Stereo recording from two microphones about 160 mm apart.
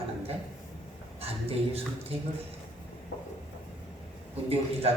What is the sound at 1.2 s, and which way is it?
Speech, 40° right (ahead or behind).